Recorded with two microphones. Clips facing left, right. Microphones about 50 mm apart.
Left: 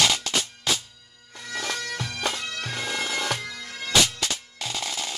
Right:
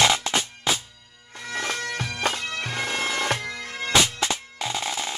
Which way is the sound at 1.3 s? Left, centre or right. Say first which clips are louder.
Right 2 dB; right.